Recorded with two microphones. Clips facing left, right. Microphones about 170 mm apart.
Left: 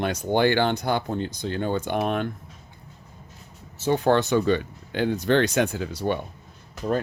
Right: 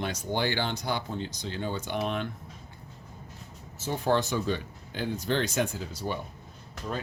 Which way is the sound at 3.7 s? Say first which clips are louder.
Left 6 dB; 70° left (ahead or behind).